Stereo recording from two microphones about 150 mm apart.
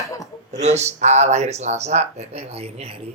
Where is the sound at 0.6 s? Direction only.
45° right (ahead or behind).